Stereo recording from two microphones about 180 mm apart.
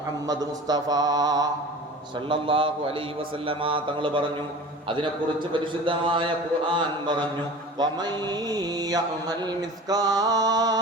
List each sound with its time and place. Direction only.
0.3 s mantra: 20° right (ahead or behind)